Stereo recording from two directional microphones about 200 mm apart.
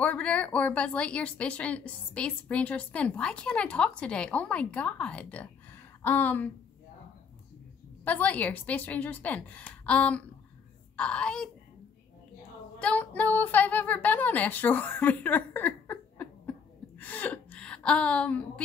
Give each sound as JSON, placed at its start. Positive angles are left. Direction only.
{"t": 0.0, "sound": "a woman's voice", "side_deg": 5}
{"t": 8.0, "sound": "a woman's voice", "side_deg": 5}
{"t": 12.7, "sound": "a woman's voice", "side_deg": 5}